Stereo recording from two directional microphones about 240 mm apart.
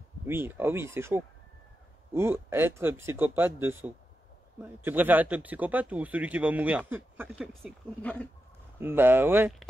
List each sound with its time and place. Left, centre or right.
0.3 s speech: centre
8.7 s speech: centre